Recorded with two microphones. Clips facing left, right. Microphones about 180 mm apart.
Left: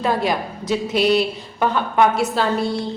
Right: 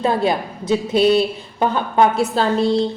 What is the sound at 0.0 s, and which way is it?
A woman's voice, 25° right (ahead or behind).